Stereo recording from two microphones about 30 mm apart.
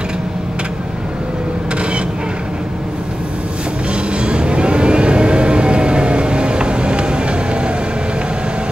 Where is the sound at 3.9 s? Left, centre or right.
Right.